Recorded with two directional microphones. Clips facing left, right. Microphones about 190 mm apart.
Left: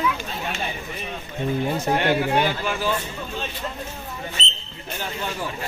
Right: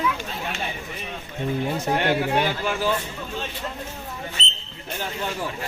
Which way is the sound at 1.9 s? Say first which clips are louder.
Left 1 dB; 50° left (ahead or behind).